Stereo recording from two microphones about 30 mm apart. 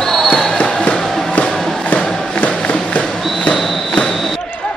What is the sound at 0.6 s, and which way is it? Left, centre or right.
Music, left.